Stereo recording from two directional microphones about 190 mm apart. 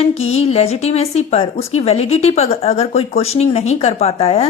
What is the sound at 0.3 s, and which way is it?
A woman's voice, 35° left (ahead or behind).